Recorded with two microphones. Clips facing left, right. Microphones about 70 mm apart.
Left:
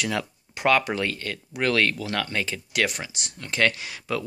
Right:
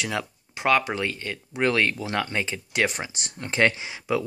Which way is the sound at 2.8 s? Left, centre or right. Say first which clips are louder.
Right 1 dB; right.